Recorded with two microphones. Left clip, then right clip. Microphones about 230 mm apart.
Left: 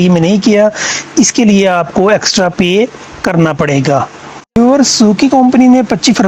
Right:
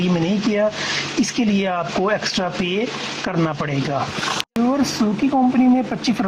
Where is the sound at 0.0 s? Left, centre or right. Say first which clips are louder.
Left 11 dB; left.